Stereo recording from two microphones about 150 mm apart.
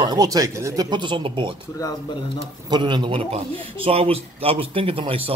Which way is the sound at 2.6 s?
30° right (ahead or behind).